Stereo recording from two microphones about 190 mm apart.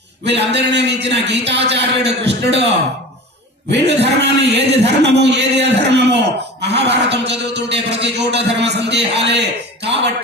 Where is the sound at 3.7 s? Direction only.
65° right (ahead or behind).